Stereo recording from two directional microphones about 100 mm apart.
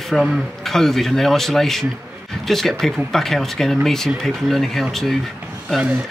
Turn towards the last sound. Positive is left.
turn(degrees=5)  # may be behind; listen again after turning